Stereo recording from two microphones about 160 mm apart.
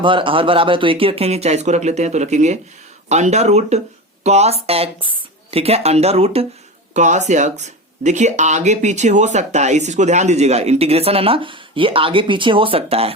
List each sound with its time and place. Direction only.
0.0 s speech: 30° right (ahead or behind)